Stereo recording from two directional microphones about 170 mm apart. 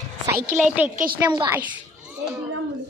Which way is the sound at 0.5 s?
5° right (ahead or behind).